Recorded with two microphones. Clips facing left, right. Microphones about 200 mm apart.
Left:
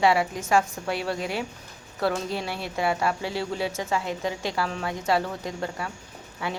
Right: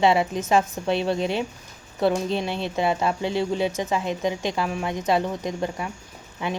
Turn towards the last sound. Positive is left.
turn(degrees=-20)  # may be behind; listen again after turning